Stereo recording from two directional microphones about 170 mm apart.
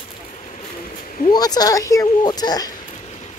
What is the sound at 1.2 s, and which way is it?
A woman's voice, 25° left (ahead or behind).